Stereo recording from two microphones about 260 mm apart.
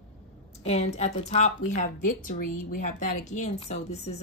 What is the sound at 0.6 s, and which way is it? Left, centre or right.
Speech, left.